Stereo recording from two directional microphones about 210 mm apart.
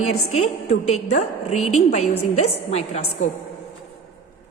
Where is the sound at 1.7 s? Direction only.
30° left (ahead or behind).